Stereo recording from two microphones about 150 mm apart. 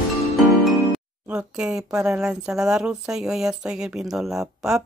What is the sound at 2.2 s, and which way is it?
Speech, 5° right (ahead or behind).